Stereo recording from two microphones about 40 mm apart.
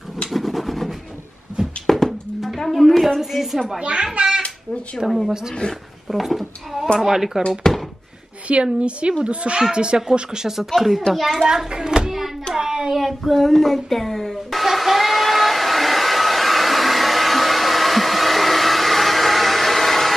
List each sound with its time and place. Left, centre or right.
0.3 s a sound: centre
1.9 s music: centre
3.2 s a sound: centre
3.8 s speech: right
4.9 s a child's voice: centre
5.6 s speech: left
6.0 s speech: centre
7.7 s a sound: centre
8.7 s a woman's voice: right
10.7 s a child's voice: centre
11.4 s a sound: centre
12.5 s hands: centre
12.9 s speech: centre
13.3 s child singing: centre